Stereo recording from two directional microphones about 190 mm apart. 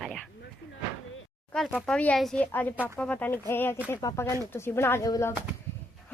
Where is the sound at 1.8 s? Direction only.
5° left (ahead or behind).